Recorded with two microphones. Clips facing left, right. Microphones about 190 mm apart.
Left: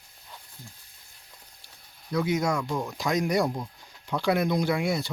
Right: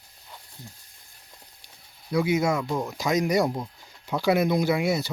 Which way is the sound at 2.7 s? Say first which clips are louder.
Right 2 dB; 20° right (ahead or behind).